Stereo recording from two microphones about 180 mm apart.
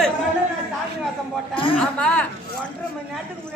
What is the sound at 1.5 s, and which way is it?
Speech, 30° left (ahead or behind).